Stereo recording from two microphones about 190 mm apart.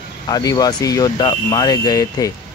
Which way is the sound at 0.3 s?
20° left (ahead or behind).